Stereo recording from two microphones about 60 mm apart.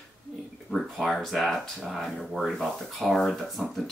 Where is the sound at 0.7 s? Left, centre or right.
Centre.